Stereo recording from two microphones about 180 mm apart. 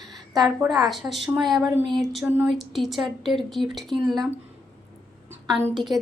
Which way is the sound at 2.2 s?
5° right (ahead or behind).